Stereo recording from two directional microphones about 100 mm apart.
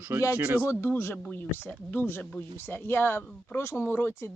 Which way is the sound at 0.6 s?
25° left (ahead or behind).